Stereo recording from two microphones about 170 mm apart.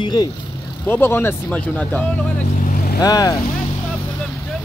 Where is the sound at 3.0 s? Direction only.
20° left (ahead or behind).